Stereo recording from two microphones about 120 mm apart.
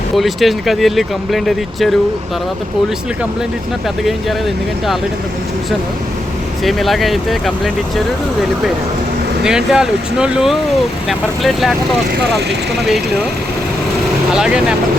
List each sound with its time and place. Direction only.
0.2 s speech: centre (ahead or behind)
6.7 s speech: centre (ahead or behind)
9.4 s speech: 5° right (ahead or behind)
14.3 s speech: 5° right (ahead or behind)